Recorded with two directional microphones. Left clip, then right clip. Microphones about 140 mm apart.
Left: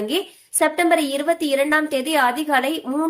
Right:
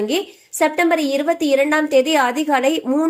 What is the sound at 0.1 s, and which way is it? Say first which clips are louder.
A woman's voice: right 2 dB; 20° right (ahead or behind).